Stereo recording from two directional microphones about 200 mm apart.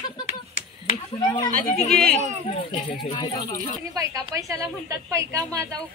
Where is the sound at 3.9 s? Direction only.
20° right (ahead or behind).